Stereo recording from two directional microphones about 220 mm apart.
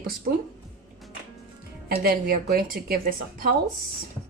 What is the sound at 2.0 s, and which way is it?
A woman's voice, 40° right (ahead or behind).